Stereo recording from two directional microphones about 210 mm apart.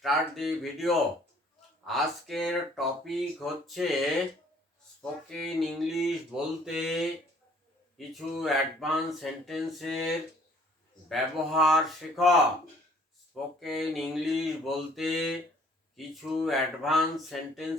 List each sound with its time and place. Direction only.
0.0 s speech: centre (ahead or behind)
5.4 s speech: centre (ahead or behind)
13.3 s speech: centre (ahead or behind)